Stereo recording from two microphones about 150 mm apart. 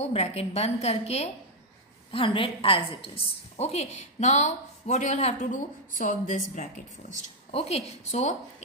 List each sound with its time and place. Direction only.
0.0 s a woman's voice: 45° left (ahead or behind)